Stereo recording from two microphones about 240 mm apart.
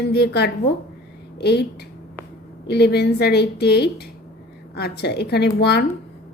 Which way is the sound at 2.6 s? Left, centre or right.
Left.